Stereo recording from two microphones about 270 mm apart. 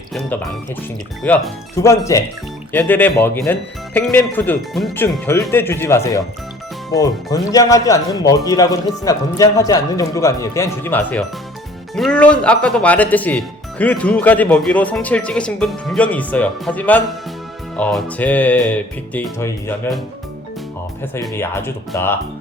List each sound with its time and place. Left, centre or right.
1.2 s speech: centre
21.0 s speech: centre